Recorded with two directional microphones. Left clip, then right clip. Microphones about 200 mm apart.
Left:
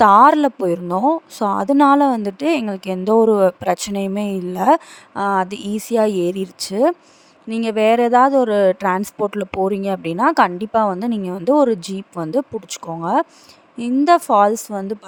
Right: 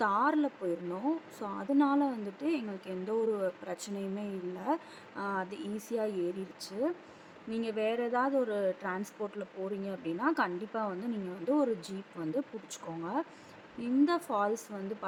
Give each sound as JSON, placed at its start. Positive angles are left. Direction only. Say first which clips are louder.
{"t": 0.0, "sound": "a woman's voice", "louder": "left 19 dB", "side_deg": 55}